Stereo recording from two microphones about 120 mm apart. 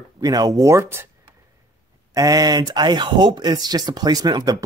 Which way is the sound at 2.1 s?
30° right (ahead or behind).